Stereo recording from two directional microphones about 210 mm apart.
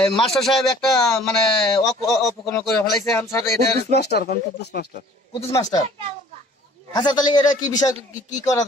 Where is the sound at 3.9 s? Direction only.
50° left (ahead or behind).